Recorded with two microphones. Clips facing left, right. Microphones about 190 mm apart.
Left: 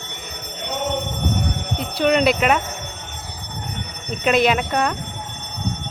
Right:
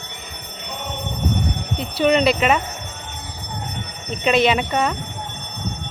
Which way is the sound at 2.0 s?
Centre (ahead or behind).